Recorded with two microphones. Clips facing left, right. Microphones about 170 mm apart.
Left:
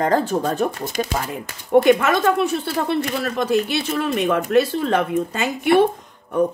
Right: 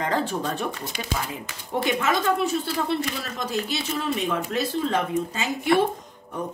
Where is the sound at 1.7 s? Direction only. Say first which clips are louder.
Left 10 dB; 55° left (ahead or behind).